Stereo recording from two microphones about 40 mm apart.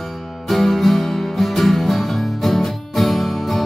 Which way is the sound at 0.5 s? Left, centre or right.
Centre.